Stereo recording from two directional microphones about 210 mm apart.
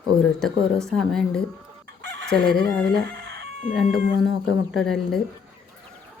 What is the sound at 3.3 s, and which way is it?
Chicken, 55° right (ahead or behind).